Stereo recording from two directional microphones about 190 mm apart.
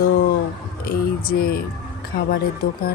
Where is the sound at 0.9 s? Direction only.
50° left (ahead or behind).